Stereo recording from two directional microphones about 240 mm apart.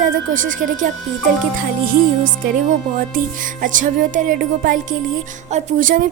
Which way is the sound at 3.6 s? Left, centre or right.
Right.